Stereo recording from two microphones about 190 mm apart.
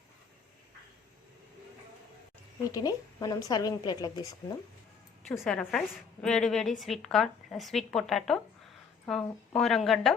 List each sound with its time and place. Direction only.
2.7 s a woman's voice: 20° left (ahead or behind)
5.4 s a woman's voice: 5° left (ahead or behind)